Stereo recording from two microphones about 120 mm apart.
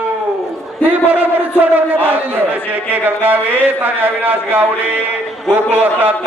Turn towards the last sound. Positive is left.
turn(degrees=-15)  # may be behind; listen again after turning